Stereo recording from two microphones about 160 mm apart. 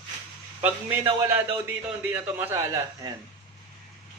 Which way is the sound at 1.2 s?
15° right (ahead or behind).